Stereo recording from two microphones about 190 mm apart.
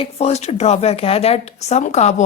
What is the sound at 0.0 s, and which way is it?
Speech, 35° left (ahead or behind).